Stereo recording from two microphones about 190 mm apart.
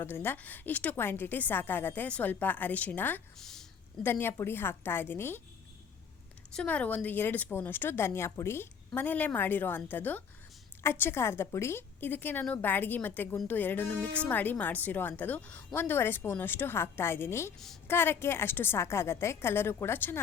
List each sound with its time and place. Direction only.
0.0 s a woman's voice: 10° left (ahead or behind)
6.5 s a woman's voice: 5° left (ahead or behind)